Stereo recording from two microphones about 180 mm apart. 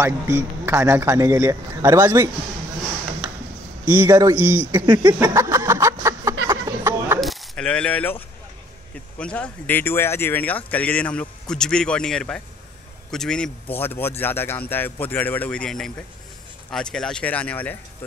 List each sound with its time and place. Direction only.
0.0 s a man's voice: 15° right (ahead or behind)
3.8 s a man's voice: 10° right (ahead or behind)
4.8 s a sound: 20° right (ahead or behind)
7.2 s coin: centre (ahead or behind)
9.2 s speech: 5° left (ahead or behind)